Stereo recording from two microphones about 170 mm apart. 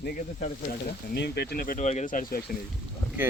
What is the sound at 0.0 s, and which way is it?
Speech, 60° left (ahead or behind).